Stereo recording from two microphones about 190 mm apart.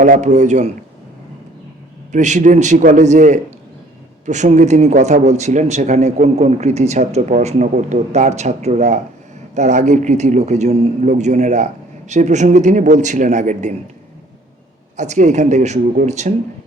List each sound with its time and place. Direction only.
0.0 s speech: 40° right (ahead or behind)
2.1 s speech: 40° right (ahead or behind)
14.9 s speech: 40° right (ahead or behind)